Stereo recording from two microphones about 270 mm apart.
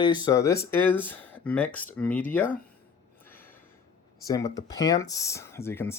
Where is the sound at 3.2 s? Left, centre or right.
Centre.